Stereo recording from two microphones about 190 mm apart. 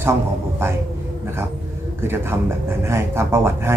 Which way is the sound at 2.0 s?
15° right (ahead or behind).